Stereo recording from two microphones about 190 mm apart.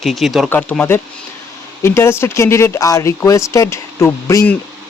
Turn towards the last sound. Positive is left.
turn(degrees=10)  # may be behind; listen again after turning